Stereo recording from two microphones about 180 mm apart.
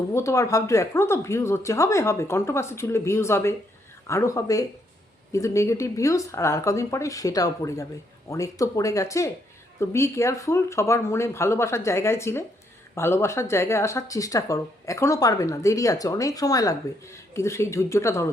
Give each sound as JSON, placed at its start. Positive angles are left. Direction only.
{"t": 0.1, "sound": "speech", "side_deg": 15}